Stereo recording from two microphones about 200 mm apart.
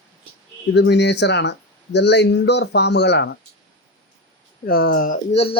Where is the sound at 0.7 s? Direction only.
60° left (ahead or behind).